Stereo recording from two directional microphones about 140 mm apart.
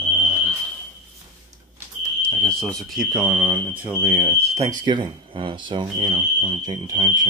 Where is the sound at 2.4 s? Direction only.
5° left (ahead or behind); by 4.4 s 15° right (ahead or behind).